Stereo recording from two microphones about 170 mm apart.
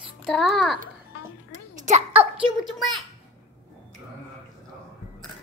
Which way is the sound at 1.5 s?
45° right (ahead or behind).